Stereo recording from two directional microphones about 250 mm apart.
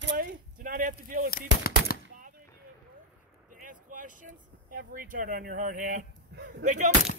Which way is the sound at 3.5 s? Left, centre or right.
Right.